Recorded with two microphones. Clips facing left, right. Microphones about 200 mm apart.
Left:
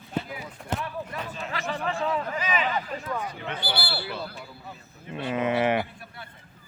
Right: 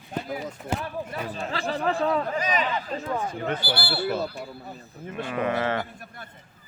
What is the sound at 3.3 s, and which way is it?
Speech, 45° right (ahead or behind).